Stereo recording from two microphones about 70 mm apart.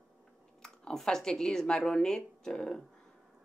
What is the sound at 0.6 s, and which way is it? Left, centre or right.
Speech, centre.